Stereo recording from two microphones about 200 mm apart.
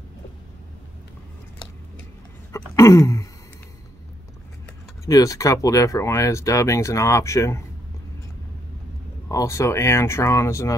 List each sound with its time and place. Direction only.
2.5 s a sound: 15° left (ahead or behind)
5.0 s speech: 15° left (ahead or behind)
9.3 s speech: 15° left (ahead or behind)